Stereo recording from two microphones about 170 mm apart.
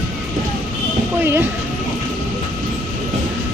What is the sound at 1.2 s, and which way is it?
Speech, 15° right (ahead or behind).